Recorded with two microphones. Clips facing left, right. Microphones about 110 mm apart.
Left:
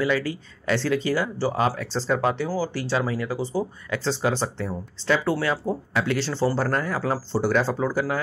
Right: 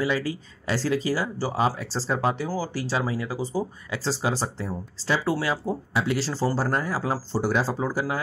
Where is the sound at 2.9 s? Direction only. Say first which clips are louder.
Left 2 dB; 20° right (ahead or behind).